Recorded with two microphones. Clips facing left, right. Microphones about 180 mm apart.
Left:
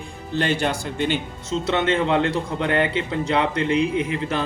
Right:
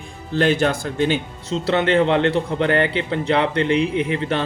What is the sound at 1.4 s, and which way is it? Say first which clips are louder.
A man's voice: right 2 dB; 35° right (ahead or behind).